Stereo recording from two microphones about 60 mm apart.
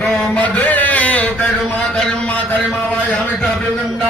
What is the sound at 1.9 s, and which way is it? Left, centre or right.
Speech, centre.